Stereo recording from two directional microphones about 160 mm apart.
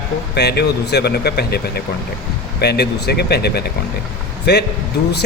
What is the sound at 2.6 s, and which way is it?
Speech, 90° left.